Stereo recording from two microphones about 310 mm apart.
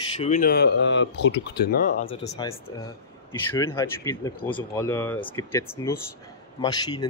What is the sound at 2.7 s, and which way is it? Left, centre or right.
Speech, centre.